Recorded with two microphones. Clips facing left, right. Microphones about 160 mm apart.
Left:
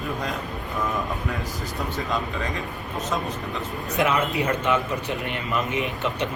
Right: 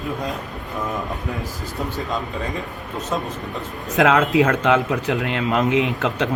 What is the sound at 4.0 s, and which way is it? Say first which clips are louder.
A man's voice: right 7 dB; 90° right.